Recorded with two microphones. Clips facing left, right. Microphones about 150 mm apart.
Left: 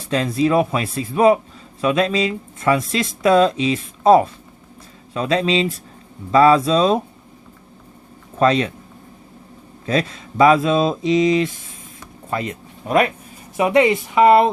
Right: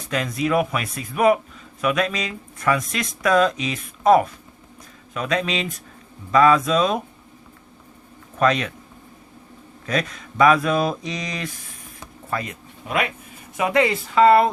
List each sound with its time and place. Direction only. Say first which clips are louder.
0.1 s speech: left 5 dB; 30° left (ahead or behind)
8.4 s speech: left 4 dB; 30° left (ahead or behind)
9.8 s speech: left 4 dB; 30° left (ahead or behind)
12.9 s speech: left 7 dB; 40° left (ahead or behind)
13.6 s speech: left 5 dB; 20° left (ahead or behind)